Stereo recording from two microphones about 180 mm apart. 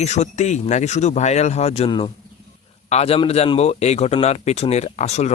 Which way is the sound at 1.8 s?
25° left (ahead or behind).